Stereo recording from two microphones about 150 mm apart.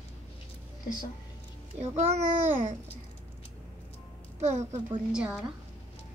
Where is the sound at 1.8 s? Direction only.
50° right (ahead or behind).